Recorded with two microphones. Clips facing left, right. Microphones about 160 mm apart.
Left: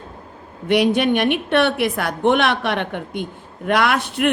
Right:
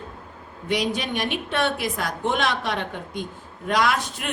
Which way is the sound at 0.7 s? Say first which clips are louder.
Left 9 dB; 60° left (ahead or behind).